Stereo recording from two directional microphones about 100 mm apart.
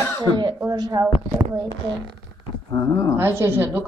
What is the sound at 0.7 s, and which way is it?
Speech, 35° right (ahead or behind).